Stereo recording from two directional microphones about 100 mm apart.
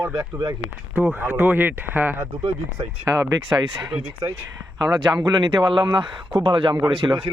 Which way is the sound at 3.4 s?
45° right (ahead or behind).